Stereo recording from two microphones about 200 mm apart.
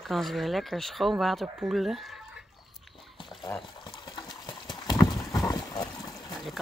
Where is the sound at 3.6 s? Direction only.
25° left (ahead or behind).